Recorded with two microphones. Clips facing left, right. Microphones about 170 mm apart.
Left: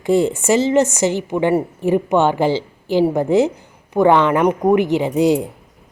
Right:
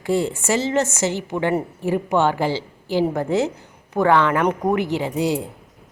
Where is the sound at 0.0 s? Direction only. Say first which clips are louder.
Left 5 dB; 20° left (ahead or behind).